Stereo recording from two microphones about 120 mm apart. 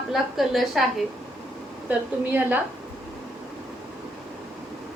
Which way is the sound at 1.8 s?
15° right (ahead or behind).